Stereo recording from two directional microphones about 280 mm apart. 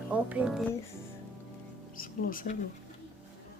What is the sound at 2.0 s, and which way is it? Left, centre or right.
Speech, left.